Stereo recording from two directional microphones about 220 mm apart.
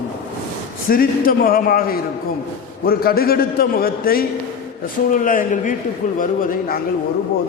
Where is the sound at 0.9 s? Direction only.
40° left (ahead or behind).